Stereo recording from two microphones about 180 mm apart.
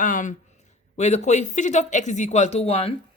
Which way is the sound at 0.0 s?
45° left (ahead or behind).